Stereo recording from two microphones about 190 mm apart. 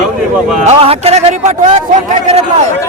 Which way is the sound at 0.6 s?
30° right (ahead or behind).